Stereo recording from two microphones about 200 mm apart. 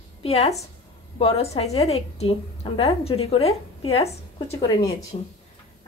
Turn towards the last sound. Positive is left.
turn(degrees=35)  # may be behind; listen again after turning